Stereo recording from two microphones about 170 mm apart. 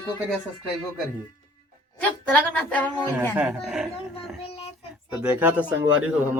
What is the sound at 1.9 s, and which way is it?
Speech, 10° left (ahead or behind).